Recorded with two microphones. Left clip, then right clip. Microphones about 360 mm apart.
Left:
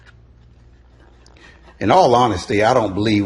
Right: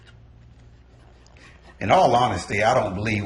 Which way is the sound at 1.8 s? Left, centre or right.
Centre.